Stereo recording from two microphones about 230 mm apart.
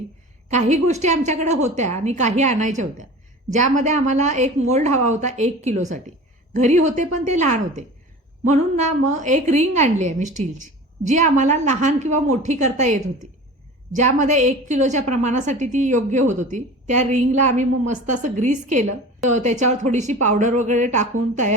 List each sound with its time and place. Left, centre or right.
0.5 s a woman's voice: right